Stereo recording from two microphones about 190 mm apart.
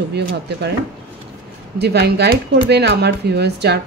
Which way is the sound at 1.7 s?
60° right (ahead or behind).